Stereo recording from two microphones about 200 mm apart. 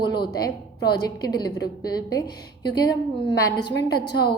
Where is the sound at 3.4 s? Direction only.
50° left (ahead or behind).